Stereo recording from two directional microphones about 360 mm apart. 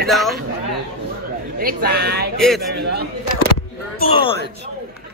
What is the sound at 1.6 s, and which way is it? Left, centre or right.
Speech, right.